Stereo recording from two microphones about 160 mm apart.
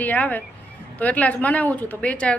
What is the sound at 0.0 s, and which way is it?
Music, 10° left (ahead or behind).